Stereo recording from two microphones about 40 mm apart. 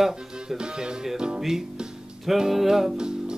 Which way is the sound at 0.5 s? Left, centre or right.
Centre.